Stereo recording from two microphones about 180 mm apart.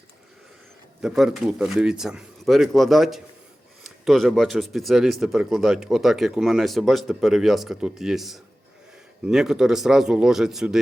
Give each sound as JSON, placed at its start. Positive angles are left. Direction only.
{"t": 1.0, "sound": "speech", "side_deg": 0}